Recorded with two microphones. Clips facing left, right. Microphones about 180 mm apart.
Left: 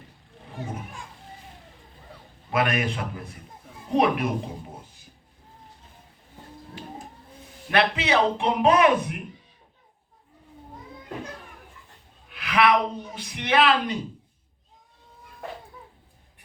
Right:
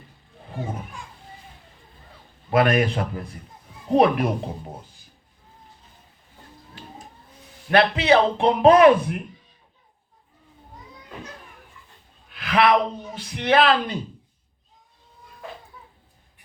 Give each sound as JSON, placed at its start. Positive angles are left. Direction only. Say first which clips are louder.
{"t": 2.5, "sound": "a man's voice", "louder": "right 6 dB", "side_deg": -40}
{"t": 7.7, "sound": "a man's voice", "louder": "right 5 dB", "side_deg": -40}
{"t": 12.5, "sound": "a sound", "louder": "right 2 dB", "side_deg": -35}
{"t": 13.1, "sound": "a man's voice", "louder": "right 4 dB", "side_deg": -40}